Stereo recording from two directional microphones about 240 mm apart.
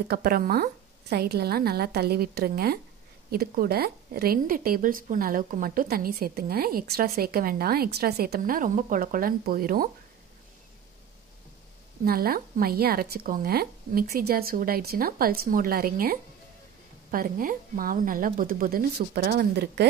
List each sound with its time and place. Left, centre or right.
0.1 s a woman's voice: right
12.0 s a woman's voice: right